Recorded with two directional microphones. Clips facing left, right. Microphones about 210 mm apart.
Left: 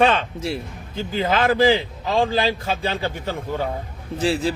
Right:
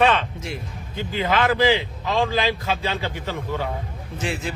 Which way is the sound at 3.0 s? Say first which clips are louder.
Left 2 dB; 50° left (ahead or behind).